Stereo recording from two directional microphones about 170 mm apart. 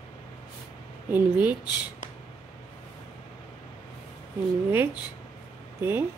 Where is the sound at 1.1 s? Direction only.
10° right (ahead or behind).